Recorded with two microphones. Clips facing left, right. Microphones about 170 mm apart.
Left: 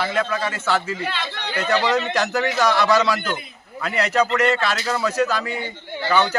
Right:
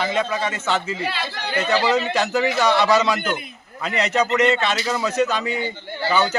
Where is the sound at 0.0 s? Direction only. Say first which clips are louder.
Right 1 dB; 20° right (ahead or behind).